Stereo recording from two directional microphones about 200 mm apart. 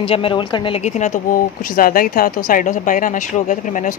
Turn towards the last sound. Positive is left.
turn(degrees=40)  # may be behind; listen again after turning